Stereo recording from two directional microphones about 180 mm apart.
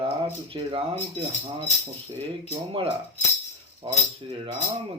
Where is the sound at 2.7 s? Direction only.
30° right (ahead or behind).